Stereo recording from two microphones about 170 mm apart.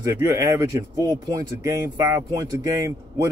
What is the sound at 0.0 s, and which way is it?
Speech, 20° right (ahead or behind).